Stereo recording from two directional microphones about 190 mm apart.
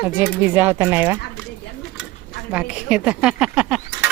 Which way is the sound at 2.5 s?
5° right (ahead or behind).